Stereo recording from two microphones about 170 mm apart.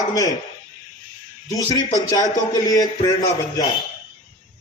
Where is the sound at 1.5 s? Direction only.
20° left (ahead or behind).